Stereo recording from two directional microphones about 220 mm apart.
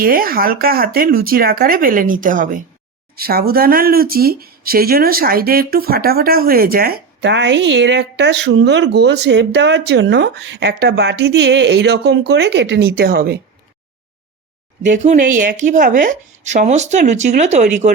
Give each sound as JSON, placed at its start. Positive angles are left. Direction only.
{"t": 0.0, "sound": "speech", "side_deg": -40}
{"t": 14.8, "sound": "speech", "side_deg": -35}